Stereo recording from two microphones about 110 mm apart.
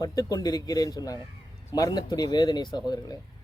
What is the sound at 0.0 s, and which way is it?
A man's voice, 35° left (ahead or behind).